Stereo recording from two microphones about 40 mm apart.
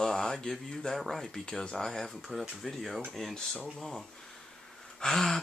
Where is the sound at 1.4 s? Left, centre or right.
Centre.